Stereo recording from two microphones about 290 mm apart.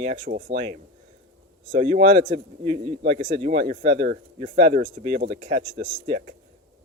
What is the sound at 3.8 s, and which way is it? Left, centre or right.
Speech, right.